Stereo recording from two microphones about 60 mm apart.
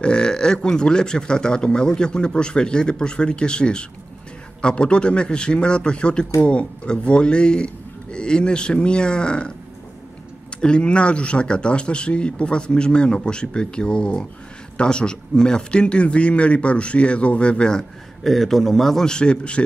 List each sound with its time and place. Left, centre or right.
0.0 s a man's voice: centre
10.6 s a man's voice: centre